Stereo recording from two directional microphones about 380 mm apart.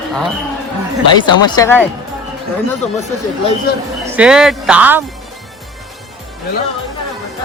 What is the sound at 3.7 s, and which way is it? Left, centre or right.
Speech, left.